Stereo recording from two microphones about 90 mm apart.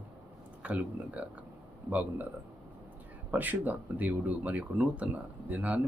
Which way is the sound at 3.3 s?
20° right (ahead or behind).